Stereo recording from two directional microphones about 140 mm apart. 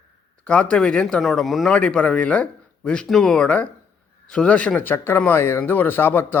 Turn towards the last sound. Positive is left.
turn(degrees=15)  # may be behind; listen again after turning